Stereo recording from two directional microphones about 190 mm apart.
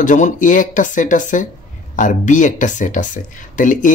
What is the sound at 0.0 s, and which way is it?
Speech, 40° left (ahead or behind).